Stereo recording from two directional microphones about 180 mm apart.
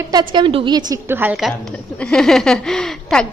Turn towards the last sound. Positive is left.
turn(degrees=5)  # may be behind; listen again after turning